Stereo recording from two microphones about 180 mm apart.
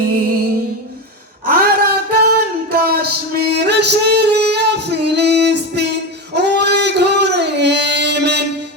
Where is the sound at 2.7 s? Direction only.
60° right (ahead or behind).